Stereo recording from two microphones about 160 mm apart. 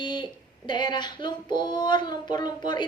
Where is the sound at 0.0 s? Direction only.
30° left (ahead or behind).